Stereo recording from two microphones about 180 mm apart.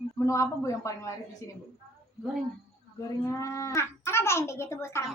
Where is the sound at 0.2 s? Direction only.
15° left (ahead or behind).